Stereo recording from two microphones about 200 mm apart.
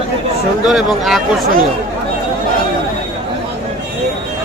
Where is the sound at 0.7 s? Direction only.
Centre (ahead or behind).